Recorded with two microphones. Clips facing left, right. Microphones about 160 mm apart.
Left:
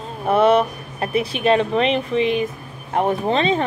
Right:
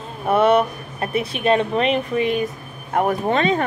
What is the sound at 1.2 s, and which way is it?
Speech, 30° left (ahead or behind).